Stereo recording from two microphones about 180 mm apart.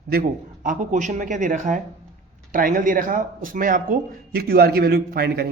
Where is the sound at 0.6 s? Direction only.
45° right (ahead or behind).